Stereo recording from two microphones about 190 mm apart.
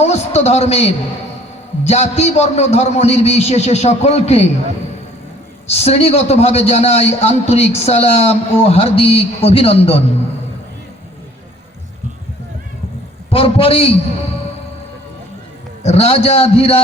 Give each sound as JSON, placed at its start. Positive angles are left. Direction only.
{"t": 0.0, "sound": "a man's voice", "side_deg": 35}
{"t": 5.6, "sound": "a man's voice", "side_deg": 35}
{"t": 13.3, "sound": "a man's voice", "side_deg": 30}
{"t": 15.8, "sound": "a man's voice", "side_deg": 35}